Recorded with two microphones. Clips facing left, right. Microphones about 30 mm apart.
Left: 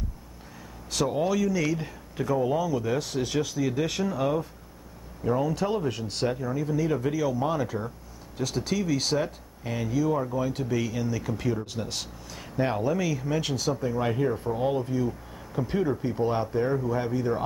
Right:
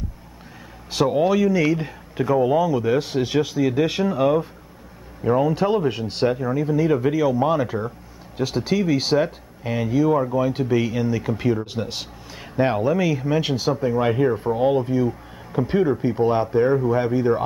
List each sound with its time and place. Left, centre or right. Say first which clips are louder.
0.9 s speech: right 7 dB; right